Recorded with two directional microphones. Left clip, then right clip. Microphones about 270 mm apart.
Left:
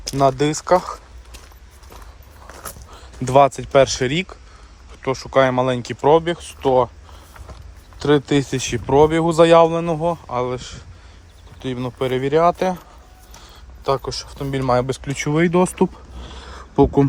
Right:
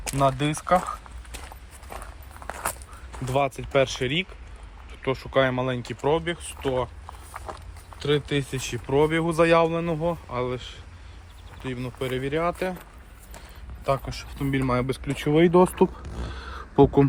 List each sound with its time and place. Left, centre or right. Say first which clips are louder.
0.2 s speech: left 7 dB; centre
3.2 s speech: left 11 dB; centre
7.9 s speech: left 8 dB; left
13.8 s speech: left 5 dB; centre
15.1 s speech: left 1 dB; left
15.5 s speech: left 1 dB; left
16.3 s a sound: left 3 dB; left